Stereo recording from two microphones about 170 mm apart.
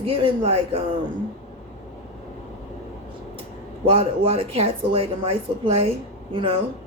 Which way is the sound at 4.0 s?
35° right (ahead or behind).